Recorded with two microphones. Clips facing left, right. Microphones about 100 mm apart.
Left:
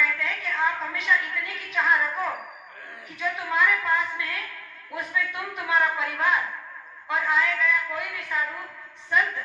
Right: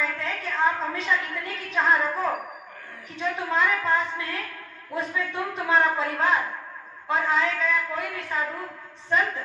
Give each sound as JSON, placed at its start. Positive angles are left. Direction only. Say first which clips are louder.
{"t": 0.0, "sound": "a woman's voice", "louder": "left 1 dB", "side_deg": -30}